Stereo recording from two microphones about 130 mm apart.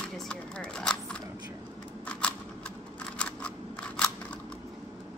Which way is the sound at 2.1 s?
10° left (ahead or behind).